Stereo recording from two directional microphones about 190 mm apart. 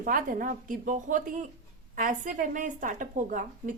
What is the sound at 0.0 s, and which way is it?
A woman's voice, 45° right (ahead or behind).